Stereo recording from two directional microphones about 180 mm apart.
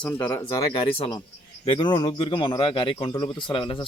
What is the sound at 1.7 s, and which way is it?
A man's voice, 25° left (ahead or behind).